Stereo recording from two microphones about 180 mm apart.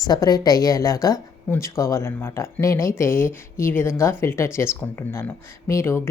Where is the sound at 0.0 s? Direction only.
20° left (ahead or behind).